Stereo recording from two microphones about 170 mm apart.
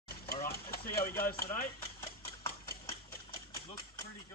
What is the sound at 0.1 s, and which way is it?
Typewriter, 60° left (ahead or behind).